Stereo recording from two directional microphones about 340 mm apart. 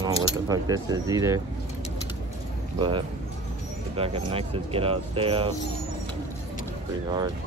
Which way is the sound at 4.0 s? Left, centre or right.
Centre.